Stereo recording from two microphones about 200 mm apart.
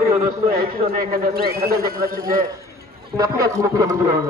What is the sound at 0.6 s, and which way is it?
A man's voice, 45° right (ahead or behind).